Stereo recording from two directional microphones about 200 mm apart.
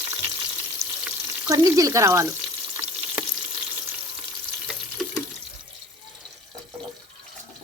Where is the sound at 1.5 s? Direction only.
15° right (ahead or behind).